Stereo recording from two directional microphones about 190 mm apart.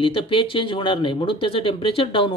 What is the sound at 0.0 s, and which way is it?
Speech, 25° left (ahead or behind).